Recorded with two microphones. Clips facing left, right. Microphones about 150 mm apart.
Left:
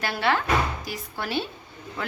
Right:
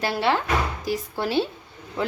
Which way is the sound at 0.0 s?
25° right (ahead or behind).